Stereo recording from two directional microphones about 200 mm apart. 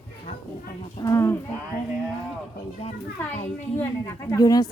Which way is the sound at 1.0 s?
15° left (ahead or behind).